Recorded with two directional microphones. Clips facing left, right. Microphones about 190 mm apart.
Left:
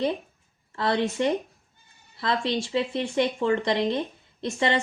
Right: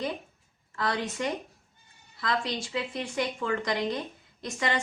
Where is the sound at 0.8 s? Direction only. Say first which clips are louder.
Left 6 dB; 30° left (ahead or behind).